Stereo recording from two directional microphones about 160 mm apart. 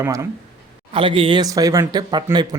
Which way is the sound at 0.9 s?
35° right (ahead or behind).